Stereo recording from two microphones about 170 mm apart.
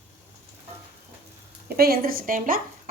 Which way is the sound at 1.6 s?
60° right (ahead or behind).